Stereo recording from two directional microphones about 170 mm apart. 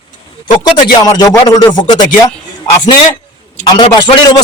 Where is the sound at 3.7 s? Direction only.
25° left (ahead or behind).